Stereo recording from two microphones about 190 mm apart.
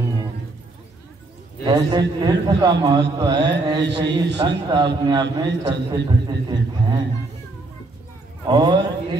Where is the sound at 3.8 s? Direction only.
65° right (ahead or behind).